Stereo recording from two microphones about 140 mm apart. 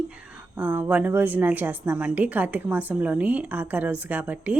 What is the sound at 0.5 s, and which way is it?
A woman's voice, 15° right (ahead or behind).